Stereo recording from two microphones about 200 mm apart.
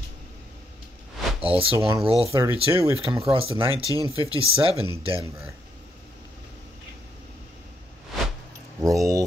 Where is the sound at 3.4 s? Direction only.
30° right (ahead or behind).